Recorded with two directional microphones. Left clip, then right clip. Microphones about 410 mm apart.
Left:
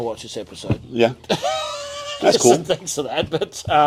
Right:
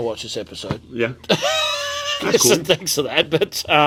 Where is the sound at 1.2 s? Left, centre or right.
Right.